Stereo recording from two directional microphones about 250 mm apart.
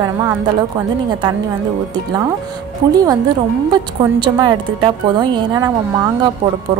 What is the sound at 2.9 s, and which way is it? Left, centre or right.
A woman's voice, centre.